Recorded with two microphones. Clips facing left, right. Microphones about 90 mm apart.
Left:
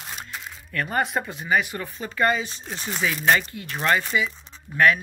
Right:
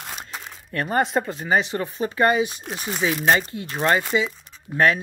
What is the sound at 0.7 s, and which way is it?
Speech, 25° right (ahead or behind).